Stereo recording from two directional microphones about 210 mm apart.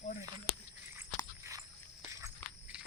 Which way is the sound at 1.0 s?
15° right (ahead or behind).